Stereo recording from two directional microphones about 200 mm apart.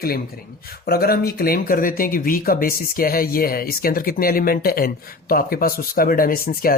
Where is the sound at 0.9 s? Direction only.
50° left (ahead or behind).